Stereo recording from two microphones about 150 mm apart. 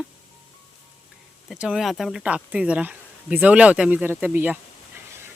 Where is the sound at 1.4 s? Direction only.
5° right (ahead or behind).